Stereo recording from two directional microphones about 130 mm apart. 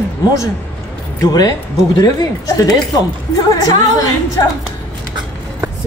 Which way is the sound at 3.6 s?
25° left (ahead or behind).